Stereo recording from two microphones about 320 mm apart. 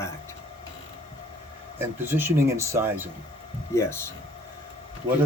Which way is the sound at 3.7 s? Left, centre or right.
Centre.